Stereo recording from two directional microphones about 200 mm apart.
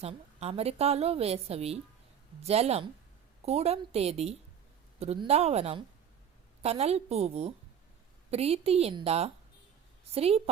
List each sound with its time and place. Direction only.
0.0 s a woman's voice: 30° right (ahead or behind)